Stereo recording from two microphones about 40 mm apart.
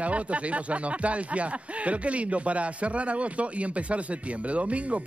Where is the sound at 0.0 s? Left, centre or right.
Right.